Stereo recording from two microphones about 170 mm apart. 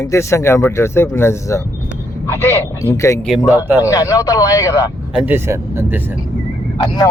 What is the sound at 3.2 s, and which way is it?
Speech, 5° right (ahead or behind).